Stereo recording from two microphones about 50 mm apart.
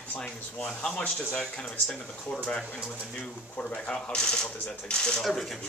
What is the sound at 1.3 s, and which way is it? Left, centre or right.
Speech, centre.